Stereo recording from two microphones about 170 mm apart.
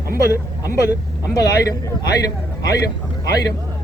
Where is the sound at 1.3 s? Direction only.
20° left (ahead or behind).